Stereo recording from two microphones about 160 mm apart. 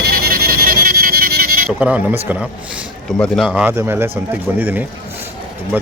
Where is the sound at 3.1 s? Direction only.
5° left (ahead or behind).